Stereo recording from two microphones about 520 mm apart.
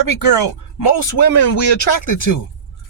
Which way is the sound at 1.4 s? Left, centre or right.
Left.